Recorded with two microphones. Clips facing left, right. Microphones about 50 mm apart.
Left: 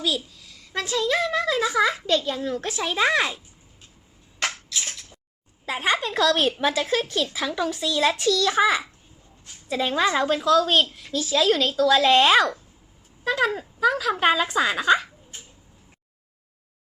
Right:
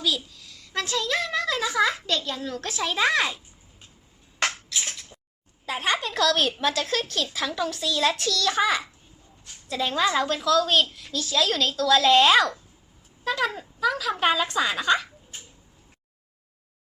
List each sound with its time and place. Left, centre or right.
0.4 s a child's voice: left
4.4 s a sound: centre
5.6 s a woman's voice: centre